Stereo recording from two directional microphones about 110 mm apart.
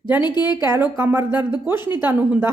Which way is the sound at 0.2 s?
40° left (ahead or behind).